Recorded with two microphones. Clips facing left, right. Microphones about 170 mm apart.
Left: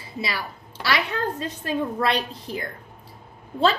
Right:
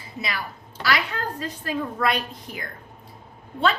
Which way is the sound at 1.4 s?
30° left (ahead or behind).